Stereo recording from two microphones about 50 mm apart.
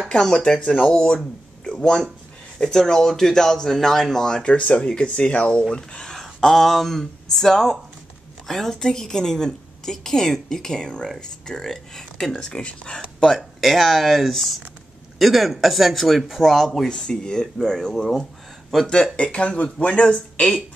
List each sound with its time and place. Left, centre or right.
0.1 s a woman's voice: centre
0.6 s a woman's voice: left
4.5 s a woman's voice: left
13.4 s speech: centre
16.8 s a woman's voice: centre
19.1 s speech: left